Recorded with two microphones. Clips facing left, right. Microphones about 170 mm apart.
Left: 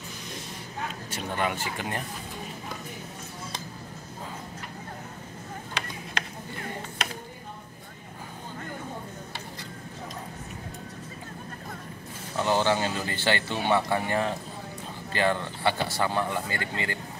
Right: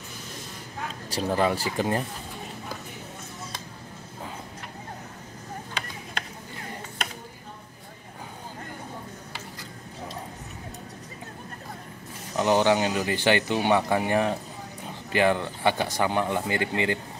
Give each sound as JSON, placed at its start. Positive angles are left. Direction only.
{"t": 1.1, "sound": "speech", "side_deg": -35}
{"t": 12.4, "sound": "speech", "side_deg": -15}